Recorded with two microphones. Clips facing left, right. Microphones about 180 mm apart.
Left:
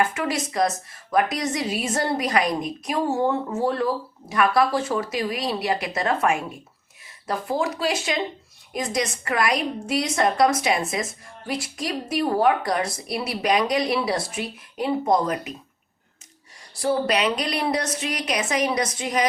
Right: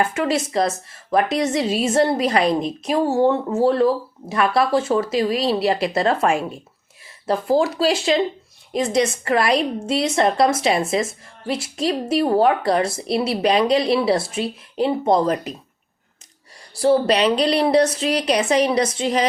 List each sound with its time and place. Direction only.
0.0 s a woman's voice: 30° right (ahead or behind)
16.8 s a woman's voice: 30° right (ahead or behind)